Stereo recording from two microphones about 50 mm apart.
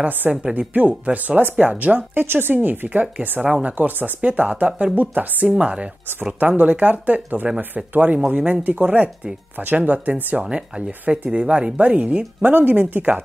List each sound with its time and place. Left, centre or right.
0.2 s speech: centre
0.6 s speech: right
6.4 s speech: right
10.4 s speech: centre
12.4 s speech: right